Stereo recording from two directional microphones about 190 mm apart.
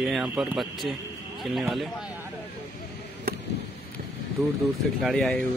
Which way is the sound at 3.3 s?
55° right (ahead or behind).